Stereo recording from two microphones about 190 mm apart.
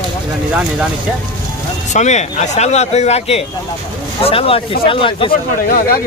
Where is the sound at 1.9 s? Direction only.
35° left (ahead or behind).